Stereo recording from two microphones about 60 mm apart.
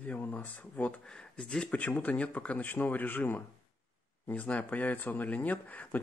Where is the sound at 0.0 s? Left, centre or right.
Left.